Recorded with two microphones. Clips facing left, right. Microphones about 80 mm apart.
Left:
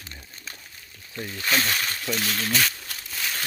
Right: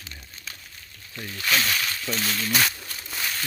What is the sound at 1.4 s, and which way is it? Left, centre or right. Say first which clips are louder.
Speech: even; left.